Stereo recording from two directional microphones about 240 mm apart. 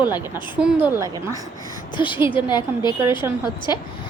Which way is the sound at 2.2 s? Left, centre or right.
Centre.